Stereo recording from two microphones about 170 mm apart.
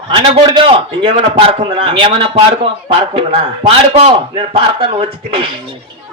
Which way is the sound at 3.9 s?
35° right (ahead or behind).